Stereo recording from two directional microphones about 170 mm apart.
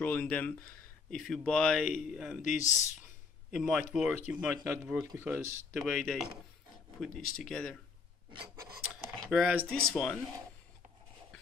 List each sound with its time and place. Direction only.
0.0 s speech: 10° left (ahead or behind)
2.4 s speech: 45° left (ahead or behind)
3.5 s speech: centre (ahead or behind)
5.8 s speech: centre (ahead or behind)
9.3 s speech: centre (ahead or behind)